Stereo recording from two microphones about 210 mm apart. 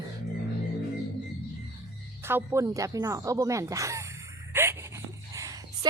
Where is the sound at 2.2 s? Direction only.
10° right (ahead or behind).